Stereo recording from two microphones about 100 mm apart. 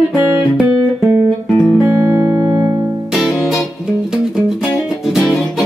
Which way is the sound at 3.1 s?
Centre (ahead or behind).